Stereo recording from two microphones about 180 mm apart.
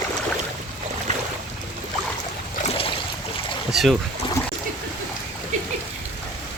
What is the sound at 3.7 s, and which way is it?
Speech, centre (ahead or behind).